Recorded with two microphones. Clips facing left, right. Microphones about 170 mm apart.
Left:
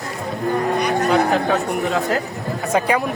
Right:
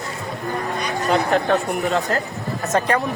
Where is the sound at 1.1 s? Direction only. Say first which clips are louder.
Right 2 dB; centre (ahead or behind).